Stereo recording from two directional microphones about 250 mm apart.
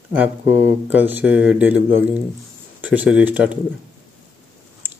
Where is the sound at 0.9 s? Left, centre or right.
Centre.